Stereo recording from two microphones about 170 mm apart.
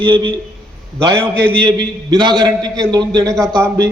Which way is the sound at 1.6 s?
25° right (ahead or behind).